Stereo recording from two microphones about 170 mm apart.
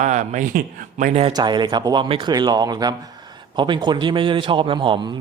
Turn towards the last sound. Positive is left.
turn(degrees=-25)  # may be behind; listen again after turning